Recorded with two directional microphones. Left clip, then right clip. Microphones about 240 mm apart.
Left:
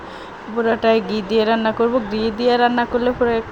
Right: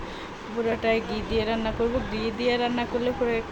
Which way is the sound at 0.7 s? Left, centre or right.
Left.